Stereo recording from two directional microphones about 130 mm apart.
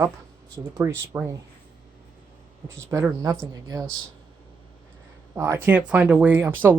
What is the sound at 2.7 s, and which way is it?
Speech, 25° right (ahead or behind).